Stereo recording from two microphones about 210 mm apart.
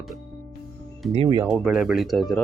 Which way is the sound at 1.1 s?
25° right (ahead or behind).